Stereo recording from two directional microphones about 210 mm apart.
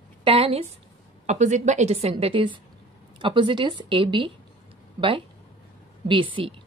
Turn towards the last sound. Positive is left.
turn(degrees=-25)  # may be behind; listen again after turning